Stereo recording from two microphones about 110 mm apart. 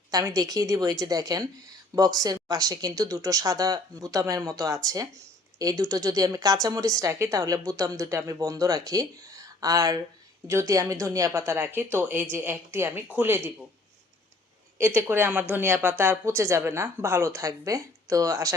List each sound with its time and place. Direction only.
0.1 s a woman's voice: 30° right (ahead or behind)
15.0 s speech: 20° right (ahead or behind)